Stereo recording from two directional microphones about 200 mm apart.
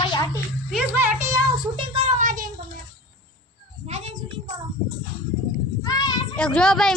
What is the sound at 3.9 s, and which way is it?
Child singing, 35° right (ahead or behind).